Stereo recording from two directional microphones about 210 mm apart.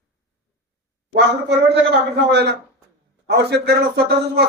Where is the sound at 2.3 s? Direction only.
55° right (ahead or behind).